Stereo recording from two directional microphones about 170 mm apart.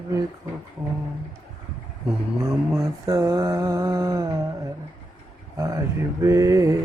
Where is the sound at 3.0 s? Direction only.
20° right (ahead or behind).